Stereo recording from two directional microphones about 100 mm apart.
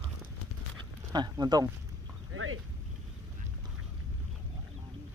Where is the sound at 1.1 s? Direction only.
45° right (ahead or behind).